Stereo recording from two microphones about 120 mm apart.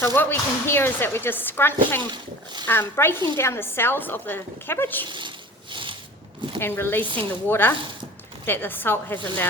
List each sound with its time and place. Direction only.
0.0 s speech: 15° left (ahead or behind)
2.0 s speech: 40° right (ahead or behind)
2.6 s speech: 20° left (ahead or behind)
5.0 s speech: 40° right (ahead or behind)
6.6 s speech: 20° left (ahead or behind)